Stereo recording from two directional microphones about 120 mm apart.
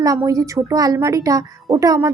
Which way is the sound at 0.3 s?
25° right (ahead or behind).